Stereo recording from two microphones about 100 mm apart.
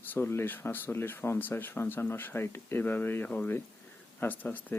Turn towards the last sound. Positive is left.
turn(degrees=15)  # may be behind; listen again after turning